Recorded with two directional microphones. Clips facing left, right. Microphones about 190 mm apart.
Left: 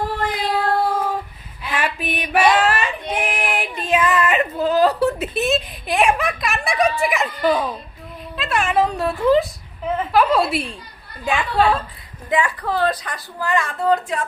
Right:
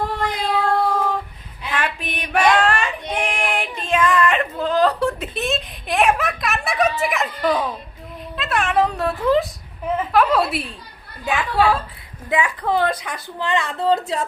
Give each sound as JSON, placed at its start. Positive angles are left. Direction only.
{"t": 0.3, "sound": "child singing", "side_deg": 5}
{"t": 1.7, "sound": "female singing", "side_deg": 5}
{"t": 7.0, "sound": "a woman's voice", "side_deg": 0}